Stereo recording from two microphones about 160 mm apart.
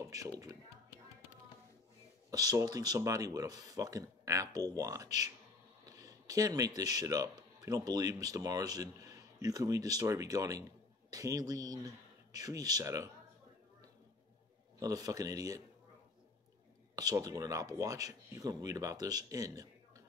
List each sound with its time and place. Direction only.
0.0 s a sound: 20° right (ahead or behind)
2.3 s a man's voice: 20° right (ahead or behind)
14.8 s speech: 20° right (ahead or behind)
16.9 s speech: 25° right (ahead or behind)